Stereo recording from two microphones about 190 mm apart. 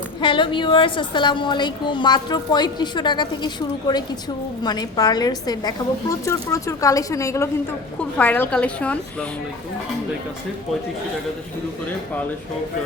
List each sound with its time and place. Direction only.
0.2 s a woman's voice: 25° left (ahead or behind); by 9.2 s 5° left (ahead or behind)